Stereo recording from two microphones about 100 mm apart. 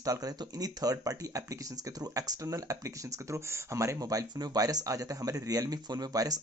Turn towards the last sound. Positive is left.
turn(degrees=-40)  # may be behind; listen again after turning